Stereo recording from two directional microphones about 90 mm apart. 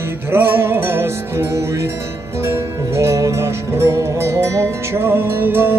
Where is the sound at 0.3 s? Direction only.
25° right (ahead or behind).